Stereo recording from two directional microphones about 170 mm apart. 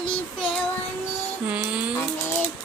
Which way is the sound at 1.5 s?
5° right (ahead or behind).